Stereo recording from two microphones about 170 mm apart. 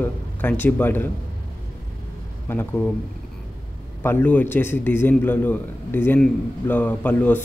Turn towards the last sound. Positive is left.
turn(degrees=10)  # may be behind; listen again after turning